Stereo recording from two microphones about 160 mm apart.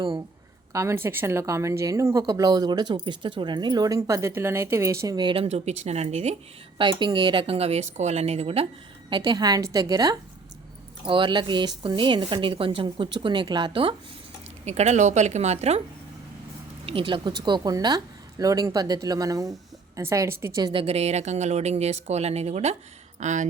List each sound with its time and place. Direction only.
0.7 s a woman's voice: 15° right (ahead or behind); by 6.3 s 40° right (ahead or behind)
7.0 s a woman's voice: 30° right (ahead or behind)
9.0 s a woman's voice: 30° right (ahead or behind)
14.6 s speech: 45° right (ahead or behind)
16.8 s a woman's voice: 35° right (ahead or behind)
20.8 s speech: 40° right (ahead or behind)